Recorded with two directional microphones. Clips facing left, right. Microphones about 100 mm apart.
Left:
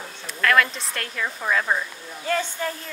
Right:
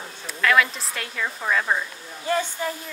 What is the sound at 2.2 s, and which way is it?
Speech, 20° right (ahead or behind).